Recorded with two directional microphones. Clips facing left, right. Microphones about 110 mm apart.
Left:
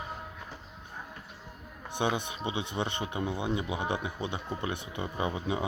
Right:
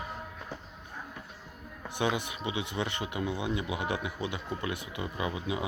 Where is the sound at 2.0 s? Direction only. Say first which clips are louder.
Even; 25° left (ahead or behind).